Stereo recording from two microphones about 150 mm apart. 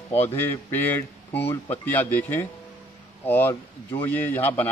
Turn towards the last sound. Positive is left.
turn(degrees=15)  # may be behind; listen again after turning